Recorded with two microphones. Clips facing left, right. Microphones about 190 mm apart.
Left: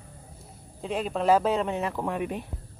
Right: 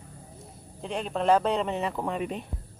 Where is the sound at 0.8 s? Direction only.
Centre (ahead or behind).